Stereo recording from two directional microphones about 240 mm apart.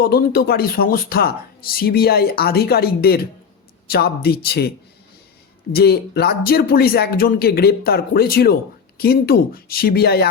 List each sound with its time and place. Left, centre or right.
0.0 s speech: left
5.7 s speech: left